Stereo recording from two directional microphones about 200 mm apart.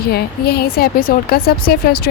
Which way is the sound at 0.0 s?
50° left (ahead or behind).